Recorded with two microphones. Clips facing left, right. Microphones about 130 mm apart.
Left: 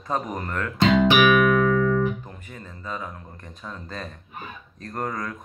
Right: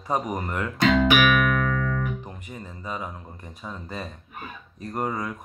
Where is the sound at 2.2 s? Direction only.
15° right (ahead or behind).